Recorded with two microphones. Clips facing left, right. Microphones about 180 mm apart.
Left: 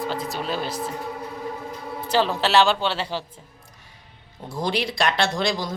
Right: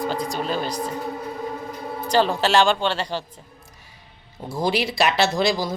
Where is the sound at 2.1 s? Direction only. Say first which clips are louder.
Right 1 dB; centre (ahead or behind).